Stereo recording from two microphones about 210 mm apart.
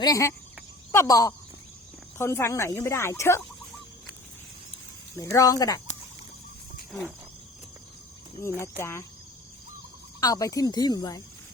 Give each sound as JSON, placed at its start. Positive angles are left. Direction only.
{"t": 0.0, "sound": "speech", "side_deg": 15}
{"t": 5.1, "sound": "speech", "side_deg": 15}
{"t": 8.4, "sound": "speech", "side_deg": 10}
{"t": 10.2, "sound": "speech", "side_deg": 15}